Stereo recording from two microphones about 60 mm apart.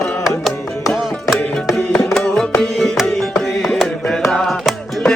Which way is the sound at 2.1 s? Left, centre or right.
Centre.